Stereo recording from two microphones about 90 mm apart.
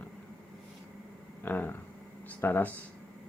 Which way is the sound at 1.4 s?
20° left (ahead or behind).